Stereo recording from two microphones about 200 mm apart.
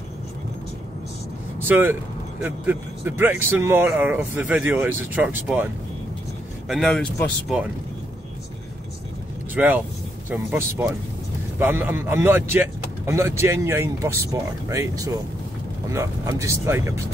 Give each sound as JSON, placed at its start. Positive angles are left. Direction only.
{"t": 1.6, "sound": "speech", "side_deg": -10}
{"t": 6.7, "sound": "speech", "side_deg": 0}
{"t": 9.6, "sound": "speech", "side_deg": -5}